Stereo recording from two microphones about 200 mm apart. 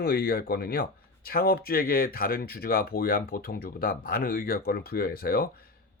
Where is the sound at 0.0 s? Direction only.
50° left (ahead or behind).